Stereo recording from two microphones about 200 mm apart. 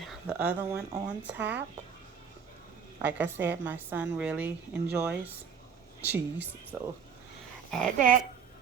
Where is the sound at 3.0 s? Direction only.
10° right (ahead or behind).